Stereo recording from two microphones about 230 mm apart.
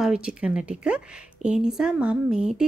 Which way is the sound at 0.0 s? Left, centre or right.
Centre.